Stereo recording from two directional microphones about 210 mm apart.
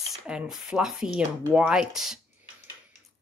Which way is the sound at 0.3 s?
5° right (ahead or behind).